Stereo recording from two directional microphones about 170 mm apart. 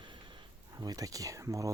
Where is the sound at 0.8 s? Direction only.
20° right (ahead or behind).